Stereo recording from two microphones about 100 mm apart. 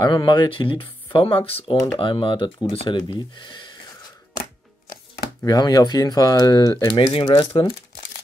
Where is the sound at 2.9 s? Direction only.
50° left (ahead or behind).